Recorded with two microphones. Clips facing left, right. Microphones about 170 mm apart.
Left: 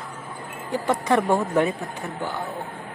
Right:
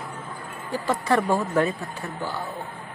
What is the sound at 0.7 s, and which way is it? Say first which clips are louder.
Speech: left 2 dB; 20° left (ahead or behind).